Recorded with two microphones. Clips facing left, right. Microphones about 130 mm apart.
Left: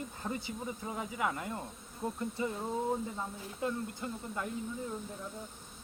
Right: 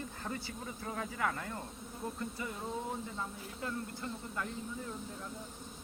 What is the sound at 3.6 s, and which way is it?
Speech, 20° left (ahead or behind).